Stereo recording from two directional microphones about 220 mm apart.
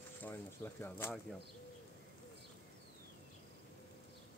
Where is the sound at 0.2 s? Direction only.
10° left (ahead or behind).